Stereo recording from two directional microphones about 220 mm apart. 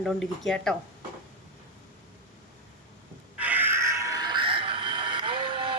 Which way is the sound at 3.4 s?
5° right (ahead or behind).